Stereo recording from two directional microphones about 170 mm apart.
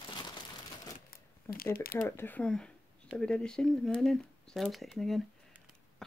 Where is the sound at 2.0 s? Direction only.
10° left (ahead or behind).